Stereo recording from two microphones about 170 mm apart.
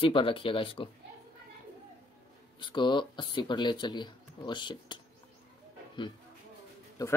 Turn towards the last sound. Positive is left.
turn(degrees=20)  # may be behind; listen again after turning